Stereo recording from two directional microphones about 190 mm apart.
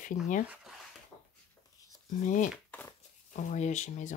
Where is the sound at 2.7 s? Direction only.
10° left (ahead or behind).